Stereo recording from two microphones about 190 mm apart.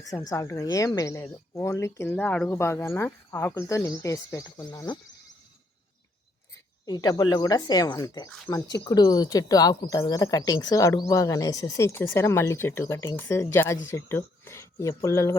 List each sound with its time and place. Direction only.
0.0 s speech: 20° left (ahead or behind)
6.8 s speech: 20° left (ahead or behind)